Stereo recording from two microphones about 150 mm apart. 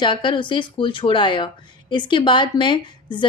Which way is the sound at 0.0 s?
30° left (ahead or behind).